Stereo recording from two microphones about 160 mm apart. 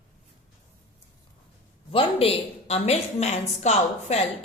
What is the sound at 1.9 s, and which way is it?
A woman's voice, 35° left (ahead or behind).